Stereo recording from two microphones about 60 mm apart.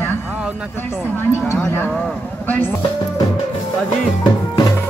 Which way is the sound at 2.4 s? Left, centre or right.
Left.